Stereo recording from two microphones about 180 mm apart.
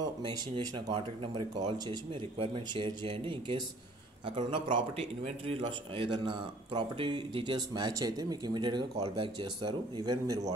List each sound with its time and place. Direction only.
0.2 s a man's voice: 25° right (ahead or behind)